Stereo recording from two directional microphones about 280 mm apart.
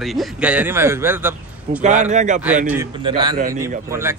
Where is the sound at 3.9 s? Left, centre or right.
Centre.